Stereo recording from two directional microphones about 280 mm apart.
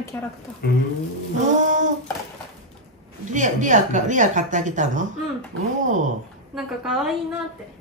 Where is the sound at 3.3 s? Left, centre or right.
Right.